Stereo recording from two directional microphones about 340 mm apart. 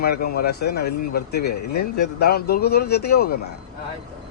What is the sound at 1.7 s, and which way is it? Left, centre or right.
Speech, left.